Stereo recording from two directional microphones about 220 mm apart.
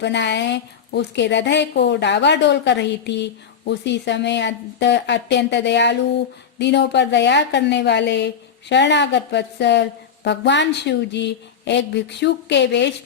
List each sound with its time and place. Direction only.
0.0 s a woman's voice: 50° left (ahead or behind)